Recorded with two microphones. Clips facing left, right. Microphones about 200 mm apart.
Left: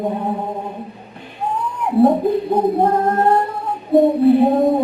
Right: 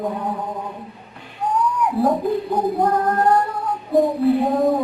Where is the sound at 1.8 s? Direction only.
25° left (ahead or behind).